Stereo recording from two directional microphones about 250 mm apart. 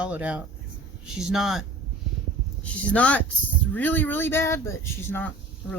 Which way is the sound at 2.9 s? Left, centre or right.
Centre.